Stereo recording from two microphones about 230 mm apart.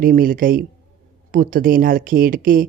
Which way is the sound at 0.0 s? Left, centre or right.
Right.